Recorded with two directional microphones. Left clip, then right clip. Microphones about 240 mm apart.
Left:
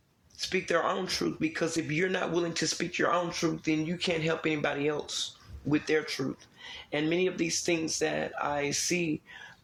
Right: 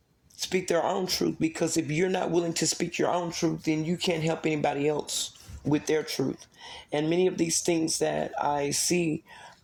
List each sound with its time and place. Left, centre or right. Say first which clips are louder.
0.3 s speech: right 2 dB; right